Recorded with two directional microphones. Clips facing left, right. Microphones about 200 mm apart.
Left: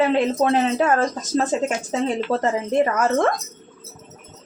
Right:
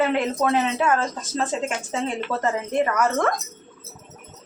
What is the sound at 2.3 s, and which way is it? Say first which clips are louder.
Speech: left 2 dB; 30° left (ahead or behind).